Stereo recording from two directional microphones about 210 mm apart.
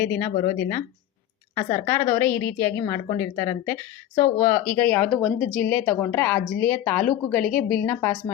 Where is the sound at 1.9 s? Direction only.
10° left (ahead or behind).